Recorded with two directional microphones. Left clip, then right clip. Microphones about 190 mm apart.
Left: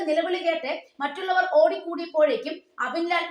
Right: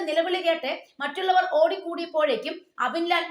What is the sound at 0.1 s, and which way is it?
A woman's voice, 35° right (ahead or behind).